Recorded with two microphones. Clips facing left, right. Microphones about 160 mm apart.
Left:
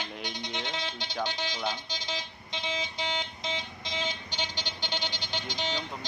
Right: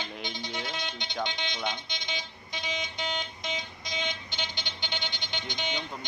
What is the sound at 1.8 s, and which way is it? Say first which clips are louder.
Vehicle: left 2 dB; 35° left (ahead or behind).